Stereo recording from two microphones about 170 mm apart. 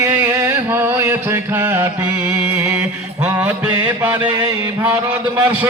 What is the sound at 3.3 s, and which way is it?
Mantra, 10° right (ahead or behind).